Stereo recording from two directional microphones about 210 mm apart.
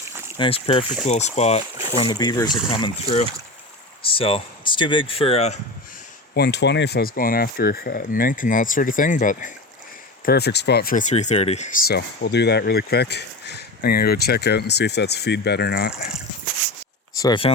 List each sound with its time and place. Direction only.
0.3 s speech: 25° left (ahead or behind)
2.0 s speech: 20° left (ahead or behind)
6.3 s speech: 55° left (ahead or behind)
10.2 s speech: 50° left (ahead or behind)
11.1 s speech: 30° left (ahead or behind)
17.2 s speech: 20° left (ahead or behind)